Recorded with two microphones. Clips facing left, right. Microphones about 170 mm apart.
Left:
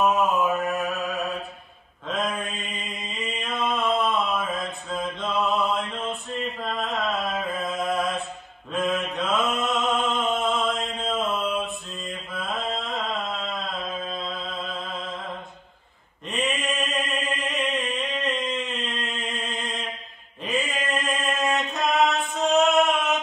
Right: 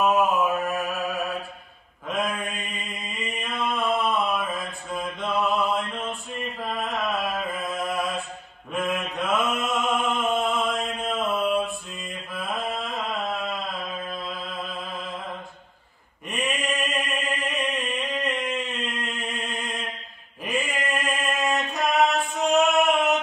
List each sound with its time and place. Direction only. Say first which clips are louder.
0.0 s mantra: even; centre (ahead or behind)
14.1 s music: left 1 dB; centre (ahead or behind)
16.3 s mantra: left 1 dB; centre (ahead or behind)
16.8 s chant: even; centre (ahead or behind)
18.6 s mantra: even; centre (ahead or behind)
21.5 s a sound: even; centre (ahead or behind)
22.6 s chant: even; centre (ahead or behind)